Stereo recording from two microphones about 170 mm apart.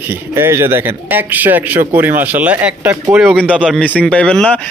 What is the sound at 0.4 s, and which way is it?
Speech, 15° right (ahead or behind).